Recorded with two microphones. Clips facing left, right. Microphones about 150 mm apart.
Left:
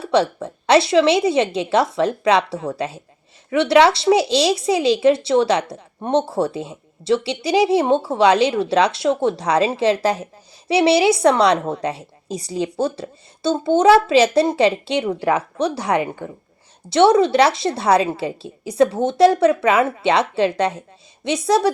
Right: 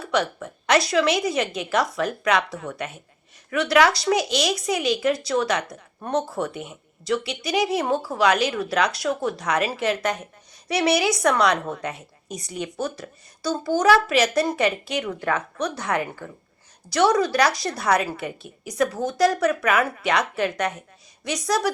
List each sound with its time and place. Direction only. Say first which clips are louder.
0.0 s speech: left 6 dB; 30° left (ahead or behind)